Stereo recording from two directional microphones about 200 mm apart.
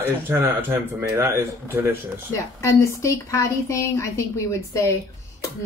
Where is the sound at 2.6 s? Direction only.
15° left (ahead or behind).